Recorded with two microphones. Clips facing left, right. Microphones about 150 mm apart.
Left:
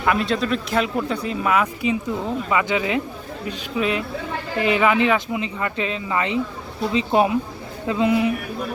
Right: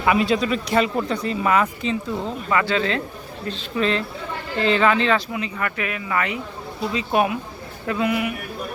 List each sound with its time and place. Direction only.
0.0 s speech: 5° right (ahead or behind); by 8.3 s 25° left (ahead or behind)